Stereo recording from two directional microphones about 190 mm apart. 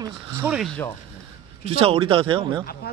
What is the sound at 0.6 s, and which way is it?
Speech, 5° left (ahead or behind).